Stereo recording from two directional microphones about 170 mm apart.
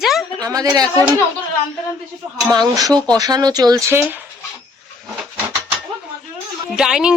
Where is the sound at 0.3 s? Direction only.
20° right (ahead or behind).